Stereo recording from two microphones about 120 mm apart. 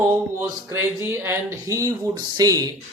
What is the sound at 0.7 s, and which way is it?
Speech, 20° right (ahead or behind).